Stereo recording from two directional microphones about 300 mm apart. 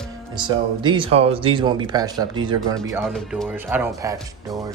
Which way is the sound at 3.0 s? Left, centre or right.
Centre.